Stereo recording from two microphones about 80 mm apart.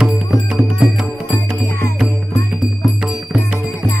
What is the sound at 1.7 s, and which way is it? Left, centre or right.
Music, left.